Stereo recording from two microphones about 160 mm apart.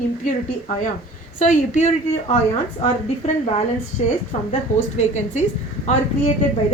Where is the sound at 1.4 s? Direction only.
50° left (ahead or behind).